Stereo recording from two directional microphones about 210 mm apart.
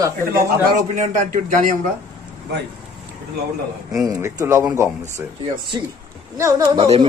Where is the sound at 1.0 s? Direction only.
40° right (ahead or behind).